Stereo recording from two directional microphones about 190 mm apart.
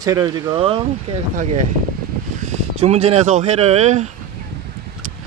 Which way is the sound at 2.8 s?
35° right (ahead or behind).